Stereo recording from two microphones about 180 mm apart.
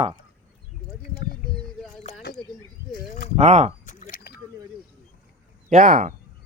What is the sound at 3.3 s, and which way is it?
Speech, 30° right (ahead or behind).